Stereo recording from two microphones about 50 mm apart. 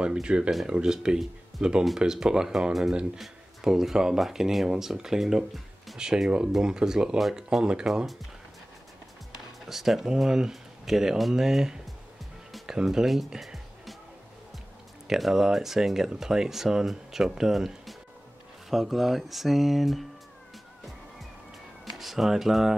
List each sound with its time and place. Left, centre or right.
0.0 s speech: centre
9.7 s speech: centre
12.8 s speech: centre
15.0 s speech: centre
21.8 s speech: centre